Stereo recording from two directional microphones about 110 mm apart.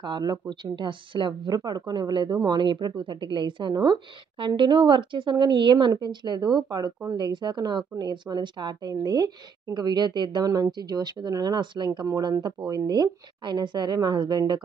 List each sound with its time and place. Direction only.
0.0 s a woman's voice: 40° right (ahead or behind)